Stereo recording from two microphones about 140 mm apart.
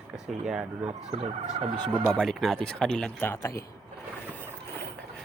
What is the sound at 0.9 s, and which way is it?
Speech, 45° right (ahead or behind).